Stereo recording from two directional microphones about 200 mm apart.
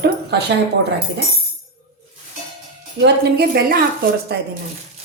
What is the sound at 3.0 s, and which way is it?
Speech, 55° right (ahead or behind).